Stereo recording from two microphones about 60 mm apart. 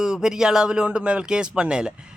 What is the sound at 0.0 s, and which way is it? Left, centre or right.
A man's voice, centre.